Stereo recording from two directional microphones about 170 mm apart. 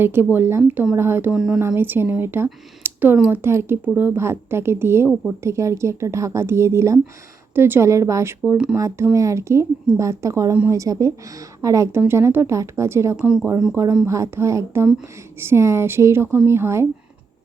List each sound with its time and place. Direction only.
0.0 s a woman's voice: 15° right (ahead or behind)
13.1 s a woman's voice: 5° right (ahead or behind)